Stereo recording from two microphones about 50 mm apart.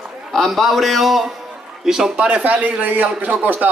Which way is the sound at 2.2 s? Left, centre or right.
Right.